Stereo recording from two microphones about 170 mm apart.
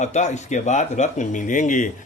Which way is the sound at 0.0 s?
45° left (ahead or behind).